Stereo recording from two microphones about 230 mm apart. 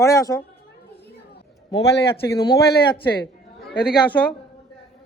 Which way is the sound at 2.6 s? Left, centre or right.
Left.